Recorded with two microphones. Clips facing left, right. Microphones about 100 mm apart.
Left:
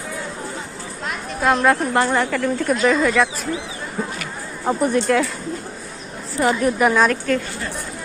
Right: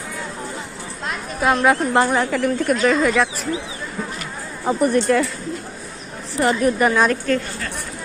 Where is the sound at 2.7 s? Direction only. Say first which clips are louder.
Left 1 dB; centre (ahead or behind).